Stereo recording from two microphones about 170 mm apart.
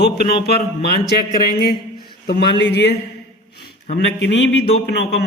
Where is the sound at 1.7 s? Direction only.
25° left (ahead or behind).